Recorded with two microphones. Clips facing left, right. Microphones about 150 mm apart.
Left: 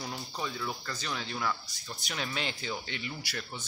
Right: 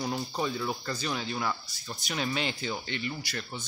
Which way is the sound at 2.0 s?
Centre (ahead or behind).